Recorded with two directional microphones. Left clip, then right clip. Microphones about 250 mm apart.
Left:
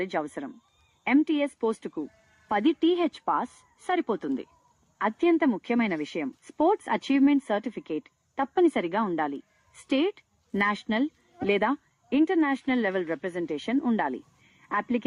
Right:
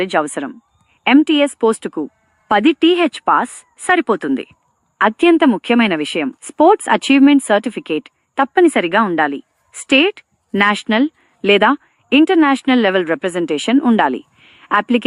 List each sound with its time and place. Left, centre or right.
0.0 s speech: right